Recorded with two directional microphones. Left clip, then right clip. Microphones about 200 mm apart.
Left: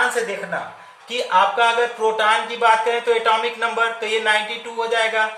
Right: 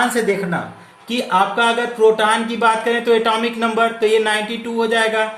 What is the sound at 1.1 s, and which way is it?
Speech, 35° right (ahead or behind).